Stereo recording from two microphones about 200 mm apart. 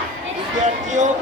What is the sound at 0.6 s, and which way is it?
Speech, 40° right (ahead or behind).